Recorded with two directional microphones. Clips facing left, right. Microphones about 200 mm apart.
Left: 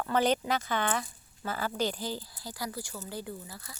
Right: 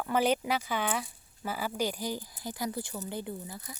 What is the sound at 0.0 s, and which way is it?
A woman's voice, 10° right (ahead or behind).